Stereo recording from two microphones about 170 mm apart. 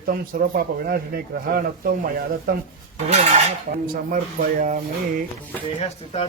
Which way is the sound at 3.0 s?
40° right (ahead or behind).